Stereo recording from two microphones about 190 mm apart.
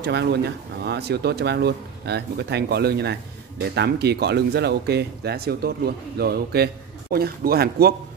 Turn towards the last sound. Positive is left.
turn(degrees=-55)  # may be behind; listen again after turning